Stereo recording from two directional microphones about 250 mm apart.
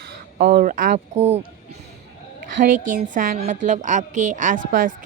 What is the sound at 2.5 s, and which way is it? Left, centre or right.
Speech, right.